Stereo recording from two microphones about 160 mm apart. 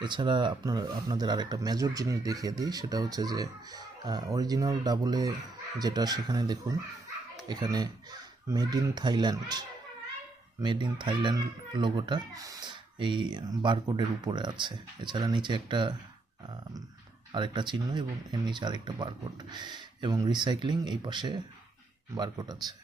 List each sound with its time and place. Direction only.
0.0 s speech: 30° right (ahead or behind)
17.3 s speech: 30° right (ahead or behind)